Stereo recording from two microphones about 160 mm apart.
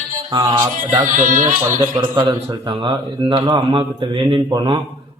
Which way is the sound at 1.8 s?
30° right (ahead or behind).